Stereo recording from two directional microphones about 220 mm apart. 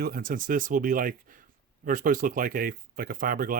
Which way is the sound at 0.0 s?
40° right (ahead or behind).